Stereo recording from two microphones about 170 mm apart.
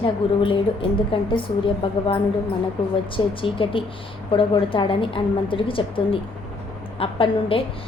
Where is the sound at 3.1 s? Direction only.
30° left (ahead or behind).